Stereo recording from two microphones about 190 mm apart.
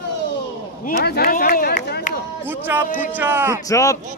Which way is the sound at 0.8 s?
55° left (ahead or behind).